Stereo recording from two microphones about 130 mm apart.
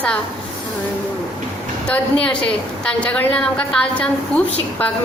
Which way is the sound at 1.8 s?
10° left (ahead or behind).